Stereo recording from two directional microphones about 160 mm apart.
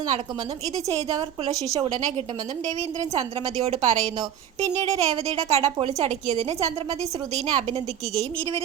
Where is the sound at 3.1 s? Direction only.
40° right (ahead or behind).